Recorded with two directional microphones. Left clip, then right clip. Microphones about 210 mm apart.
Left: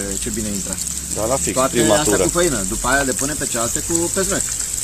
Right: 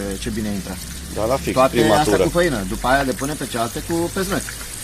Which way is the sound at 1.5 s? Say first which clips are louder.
Right 2 dB; 30° right (ahead or behind).